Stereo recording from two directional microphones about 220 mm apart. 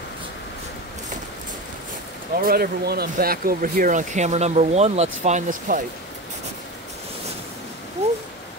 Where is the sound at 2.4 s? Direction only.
40° right (ahead or behind).